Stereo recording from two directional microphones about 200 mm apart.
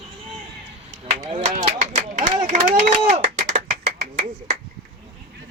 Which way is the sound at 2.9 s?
35° right (ahead or behind).